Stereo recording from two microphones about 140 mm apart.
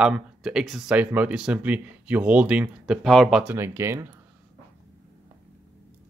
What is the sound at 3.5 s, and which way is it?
Speech, 20° right (ahead or behind).